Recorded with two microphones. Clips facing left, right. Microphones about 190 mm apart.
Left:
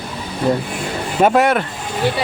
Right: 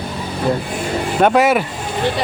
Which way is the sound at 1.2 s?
Centre (ahead or behind).